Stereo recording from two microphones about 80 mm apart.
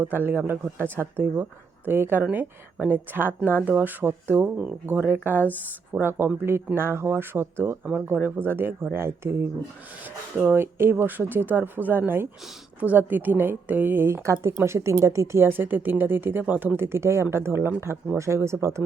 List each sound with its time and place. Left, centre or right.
0.0 s speech: right